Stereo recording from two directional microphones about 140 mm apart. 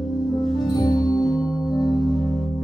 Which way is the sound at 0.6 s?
30° left (ahead or behind).